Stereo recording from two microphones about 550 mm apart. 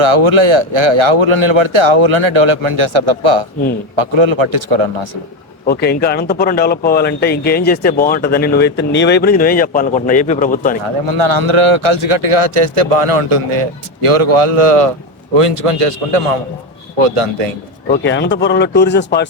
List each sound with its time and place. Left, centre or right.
0.0 s a man's voice: right
5.6 s speech: centre
11.0 s a man's voice: right
17.8 s speech: centre